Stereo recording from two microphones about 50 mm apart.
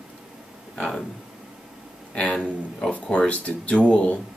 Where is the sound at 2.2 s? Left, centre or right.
Left.